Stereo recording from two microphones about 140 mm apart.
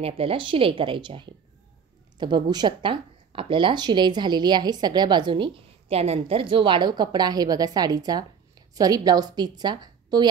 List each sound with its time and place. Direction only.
0.0 s speech: 40° right (ahead or behind)